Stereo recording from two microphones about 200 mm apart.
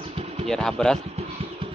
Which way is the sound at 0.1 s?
30° right (ahead or behind).